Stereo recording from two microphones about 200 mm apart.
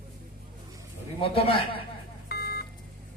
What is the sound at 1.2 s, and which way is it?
Speech, 25° left (ahead or behind).